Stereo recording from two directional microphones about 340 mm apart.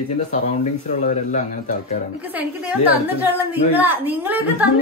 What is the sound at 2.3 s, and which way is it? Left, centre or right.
A woman's voice, centre.